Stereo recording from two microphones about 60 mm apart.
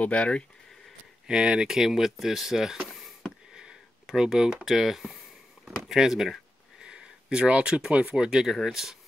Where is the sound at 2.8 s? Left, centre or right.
Centre.